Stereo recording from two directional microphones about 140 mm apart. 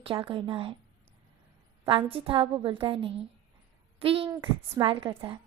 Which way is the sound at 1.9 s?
40° right (ahead or behind).